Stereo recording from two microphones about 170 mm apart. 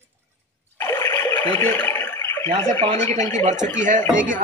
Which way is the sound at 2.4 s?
40° right (ahead or behind).